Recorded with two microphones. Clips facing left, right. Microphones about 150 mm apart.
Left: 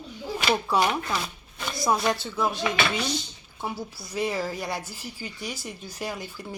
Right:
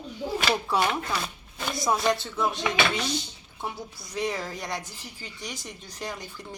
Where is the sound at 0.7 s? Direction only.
Centre (ahead or behind).